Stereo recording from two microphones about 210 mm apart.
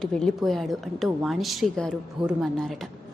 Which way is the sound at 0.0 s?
Centre (ahead or behind).